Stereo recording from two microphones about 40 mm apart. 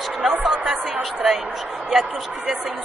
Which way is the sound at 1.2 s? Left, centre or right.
Centre.